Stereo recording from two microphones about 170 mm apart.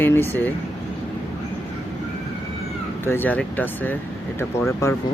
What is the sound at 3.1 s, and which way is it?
Speech, 10° left (ahead or behind).